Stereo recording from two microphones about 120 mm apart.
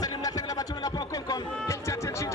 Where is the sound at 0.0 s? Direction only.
30° left (ahead or behind).